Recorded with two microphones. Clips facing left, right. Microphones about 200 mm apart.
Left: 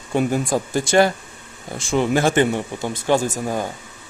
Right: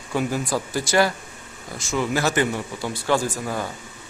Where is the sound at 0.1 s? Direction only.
20° left (ahead or behind).